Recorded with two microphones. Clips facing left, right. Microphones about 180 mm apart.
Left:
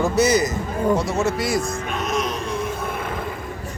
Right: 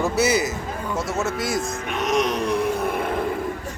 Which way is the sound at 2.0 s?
70° right (ahead or behind).